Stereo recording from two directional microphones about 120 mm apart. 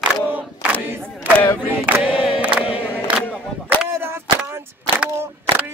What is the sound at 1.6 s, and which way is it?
Choir, 15° right (ahead or behind).